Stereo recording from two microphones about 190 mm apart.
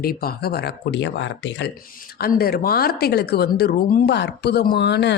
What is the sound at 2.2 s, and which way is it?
Speech, 55° left (ahead or behind).